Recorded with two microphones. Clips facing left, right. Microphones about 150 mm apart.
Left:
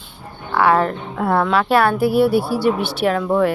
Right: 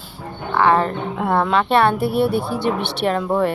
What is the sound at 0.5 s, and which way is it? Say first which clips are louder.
Speech: left 1 dB; 5° left (ahead or behind).